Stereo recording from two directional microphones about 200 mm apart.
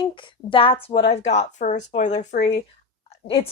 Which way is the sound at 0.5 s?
25° left (ahead or behind).